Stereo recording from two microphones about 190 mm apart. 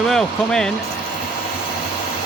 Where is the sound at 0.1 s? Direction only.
5° left (ahead or behind).